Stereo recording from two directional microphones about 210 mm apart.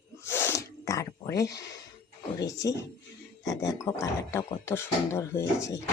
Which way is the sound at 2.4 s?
15° left (ahead or behind).